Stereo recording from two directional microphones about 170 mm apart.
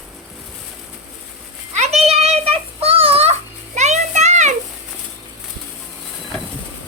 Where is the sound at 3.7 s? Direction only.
45° right (ahead or behind).